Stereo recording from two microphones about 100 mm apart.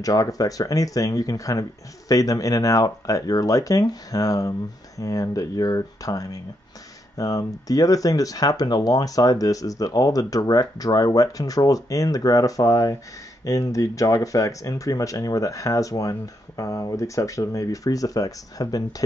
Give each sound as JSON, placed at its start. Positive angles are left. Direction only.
{"t": 0.0, "sound": "speech", "side_deg": 35}